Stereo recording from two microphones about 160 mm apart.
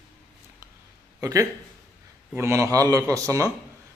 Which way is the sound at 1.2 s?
20° right (ahead or behind).